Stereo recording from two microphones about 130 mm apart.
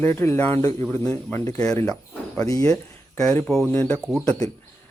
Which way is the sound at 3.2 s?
15° left (ahead or behind).